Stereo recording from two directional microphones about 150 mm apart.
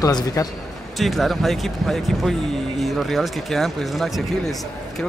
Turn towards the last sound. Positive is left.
turn(degrees=0)  # may be behind; listen again after turning